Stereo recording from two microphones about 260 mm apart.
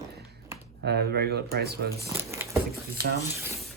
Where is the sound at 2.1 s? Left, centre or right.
Centre.